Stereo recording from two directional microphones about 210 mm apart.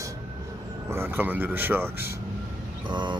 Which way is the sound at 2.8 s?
20° right (ahead or behind).